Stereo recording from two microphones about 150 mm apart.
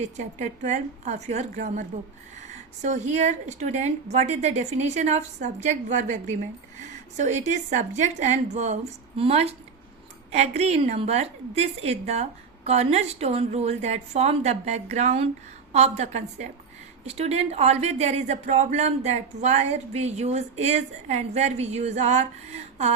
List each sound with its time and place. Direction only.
0.3 s a woman's voice: 50° right (ahead or behind)